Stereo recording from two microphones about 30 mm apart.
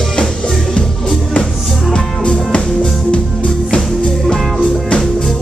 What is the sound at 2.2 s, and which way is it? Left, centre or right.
Music, left.